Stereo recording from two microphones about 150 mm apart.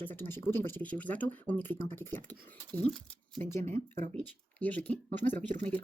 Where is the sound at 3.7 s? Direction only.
65° right (ahead or behind).